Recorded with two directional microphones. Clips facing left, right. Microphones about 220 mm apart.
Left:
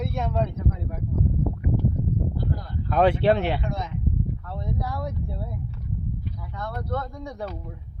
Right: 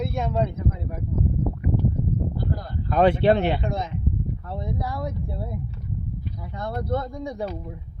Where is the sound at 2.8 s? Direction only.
Centre (ahead or behind).